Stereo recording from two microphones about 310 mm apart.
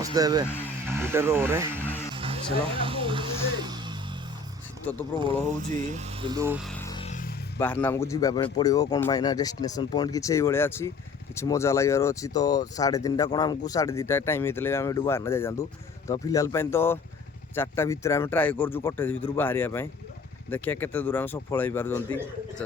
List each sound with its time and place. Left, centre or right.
0.0 s speech: centre
2.1 s a sound: centre
3.6 s music: centre
4.9 s speech: centre
5.2 s speech: right
6.7 s music: centre; by 7.3 s left
7.6 s speech: centre